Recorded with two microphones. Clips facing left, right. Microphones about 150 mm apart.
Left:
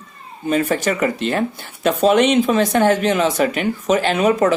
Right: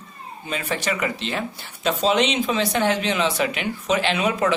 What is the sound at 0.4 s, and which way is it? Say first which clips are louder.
Speech: left 8 dB; 45° left (ahead or behind).